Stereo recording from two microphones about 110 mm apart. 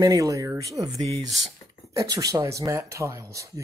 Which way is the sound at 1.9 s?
30° right (ahead or behind).